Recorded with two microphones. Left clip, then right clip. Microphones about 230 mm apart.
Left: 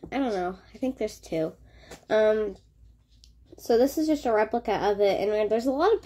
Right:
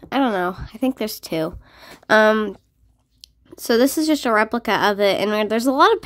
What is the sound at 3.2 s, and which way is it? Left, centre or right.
A woman's voice, right.